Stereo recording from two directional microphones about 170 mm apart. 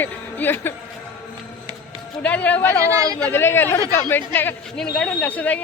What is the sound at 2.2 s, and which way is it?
Speech, 10° left (ahead or behind).